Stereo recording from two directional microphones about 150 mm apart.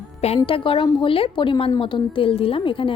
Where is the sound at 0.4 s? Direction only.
35° left (ahead or behind).